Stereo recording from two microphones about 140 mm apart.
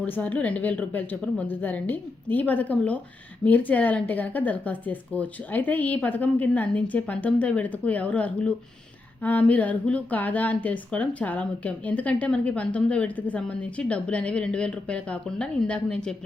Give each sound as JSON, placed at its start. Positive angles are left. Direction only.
{"t": 0.0, "sound": "a woman's voice", "side_deg": 10}